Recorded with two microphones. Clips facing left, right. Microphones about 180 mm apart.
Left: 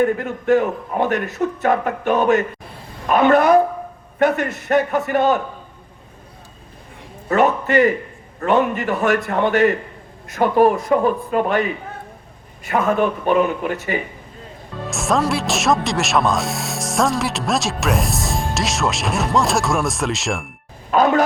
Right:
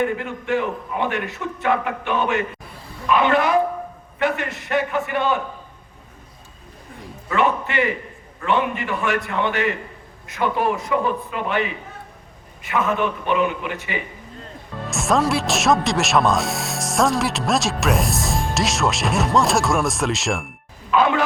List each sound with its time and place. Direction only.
0.0 s a man's voice: 40° left (ahead or behind)
7.3 s a man's voice: 40° left (ahead or behind)
14.8 s speech: centre (ahead or behind)
20.9 s speech: 40° left (ahead or behind)